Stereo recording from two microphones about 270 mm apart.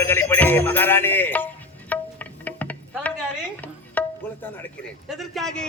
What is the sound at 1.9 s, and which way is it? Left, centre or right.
Music, centre.